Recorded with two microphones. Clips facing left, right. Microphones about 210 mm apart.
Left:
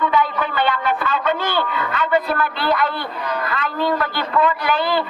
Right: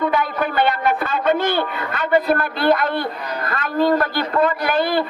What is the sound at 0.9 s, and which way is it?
A man's voice, 45° right (ahead or behind).